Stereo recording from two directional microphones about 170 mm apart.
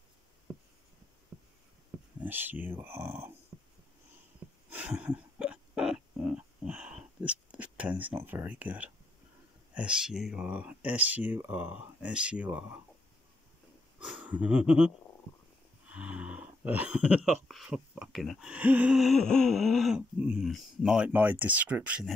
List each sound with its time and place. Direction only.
1.3 s a sound: 15° right (ahead or behind)
2.1 s speech: 10° right (ahead or behind)
3.5 s a sound: 15° right (ahead or behind)
9.8 s speech: 5° right (ahead or behind)
13.9 s speech: 5° right (ahead or behind)
15.9 s speech: 5° right (ahead or behind)